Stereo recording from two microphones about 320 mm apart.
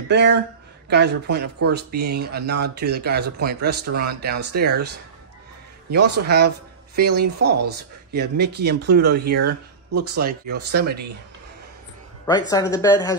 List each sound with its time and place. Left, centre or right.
0.1 s speech: right
6.1 s speech: right
12.3 s speech: centre